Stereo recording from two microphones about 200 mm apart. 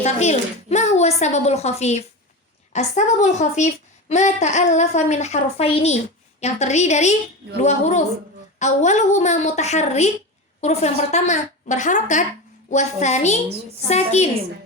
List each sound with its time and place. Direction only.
0.0 s speech: 35° left (ahead or behind)